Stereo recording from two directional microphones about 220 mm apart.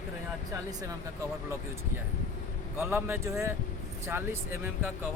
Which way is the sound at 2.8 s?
10° right (ahead or behind).